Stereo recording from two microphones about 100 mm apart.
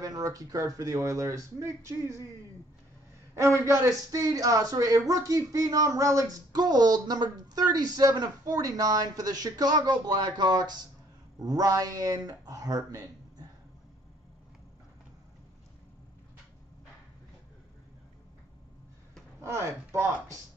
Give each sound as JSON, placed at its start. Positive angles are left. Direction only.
{"t": 0.0, "sound": "speech", "side_deg": -35}
{"t": 3.3, "sound": "speech", "side_deg": -30}
{"t": 19.4, "sound": "speech", "side_deg": -25}